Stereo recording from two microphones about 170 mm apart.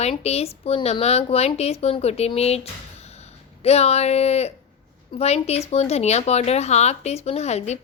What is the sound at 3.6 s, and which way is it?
A woman's voice, 40° left (ahead or behind).